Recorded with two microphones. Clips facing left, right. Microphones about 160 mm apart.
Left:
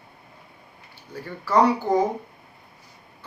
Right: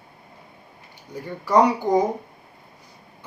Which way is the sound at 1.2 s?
15° right (ahead or behind).